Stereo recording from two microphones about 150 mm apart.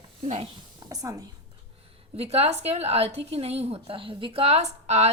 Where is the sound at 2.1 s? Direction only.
40° right (ahead or behind).